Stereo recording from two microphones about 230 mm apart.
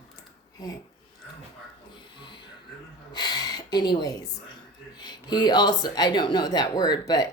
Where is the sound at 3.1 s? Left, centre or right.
Centre.